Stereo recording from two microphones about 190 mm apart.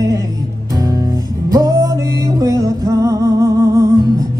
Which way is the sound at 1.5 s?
20° right (ahead or behind).